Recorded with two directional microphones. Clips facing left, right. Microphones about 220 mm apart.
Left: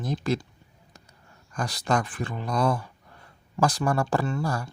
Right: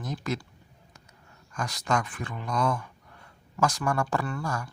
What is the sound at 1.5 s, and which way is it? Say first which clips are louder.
Speech: left 3 dB; 35° left (ahead or behind).